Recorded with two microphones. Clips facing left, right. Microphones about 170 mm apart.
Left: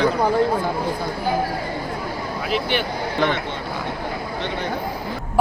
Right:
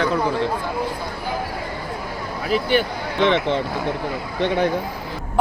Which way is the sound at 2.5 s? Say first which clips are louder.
Right 4 dB; 40° right (ahead or behind).